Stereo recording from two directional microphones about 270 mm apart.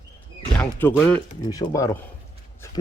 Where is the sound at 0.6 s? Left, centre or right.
Centre.